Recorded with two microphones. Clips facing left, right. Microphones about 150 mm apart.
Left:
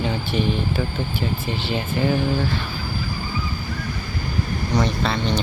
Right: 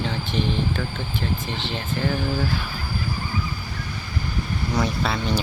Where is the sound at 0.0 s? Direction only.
10° left (ahead or behind).